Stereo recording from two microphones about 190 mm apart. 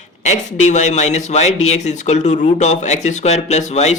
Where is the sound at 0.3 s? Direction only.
40° left (ahead or behind).